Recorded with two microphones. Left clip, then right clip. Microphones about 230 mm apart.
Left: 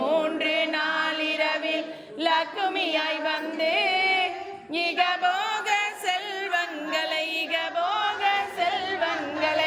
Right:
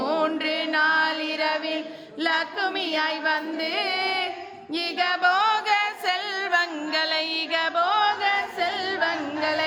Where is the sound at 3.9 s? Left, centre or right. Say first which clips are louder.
Left 2 dB; right.